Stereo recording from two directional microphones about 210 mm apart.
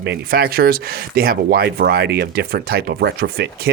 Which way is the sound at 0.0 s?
50° right (ahead or behind).